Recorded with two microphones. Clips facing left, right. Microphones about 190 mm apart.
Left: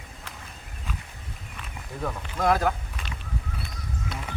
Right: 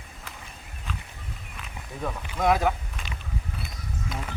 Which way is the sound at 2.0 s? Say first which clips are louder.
Even; 5° right (ahead or behind).